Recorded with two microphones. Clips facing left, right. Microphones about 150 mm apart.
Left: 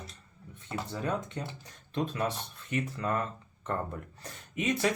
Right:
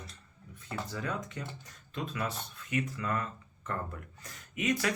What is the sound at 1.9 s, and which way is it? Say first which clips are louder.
Speech: left 5 dB; 35° left (ahead or behind).